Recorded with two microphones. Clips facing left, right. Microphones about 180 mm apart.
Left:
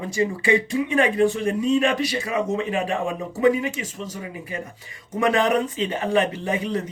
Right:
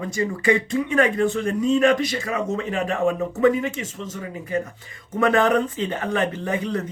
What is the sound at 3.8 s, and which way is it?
Speech, 35° left (ahead or behind).